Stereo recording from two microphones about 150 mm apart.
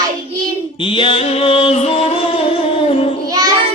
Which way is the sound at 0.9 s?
35° left (ahead or behind).